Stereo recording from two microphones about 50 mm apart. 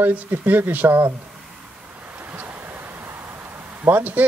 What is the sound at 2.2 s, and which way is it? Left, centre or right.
Vehicle, right.